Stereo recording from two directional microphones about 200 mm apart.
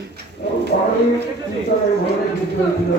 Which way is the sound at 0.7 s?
50° left (ahead or behind).